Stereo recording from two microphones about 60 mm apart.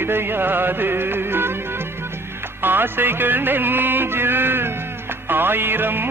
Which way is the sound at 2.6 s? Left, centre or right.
Right.